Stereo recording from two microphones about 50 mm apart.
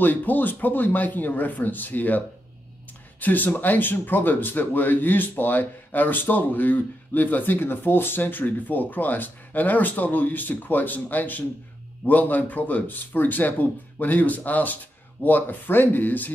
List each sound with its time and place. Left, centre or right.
0.0 s speech: left